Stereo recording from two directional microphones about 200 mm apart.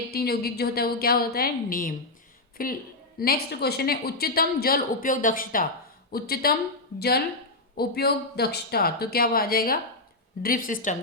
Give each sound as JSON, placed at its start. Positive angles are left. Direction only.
{"t": 0.1, "sound": "a woman's voice", "side_deg": 50}
{"t": 7.8, "sound": "a woman's voice", "side_deg": 55}